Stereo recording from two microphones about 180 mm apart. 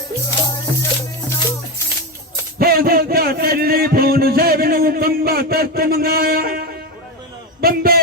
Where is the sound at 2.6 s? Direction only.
55° right (ahead or behind).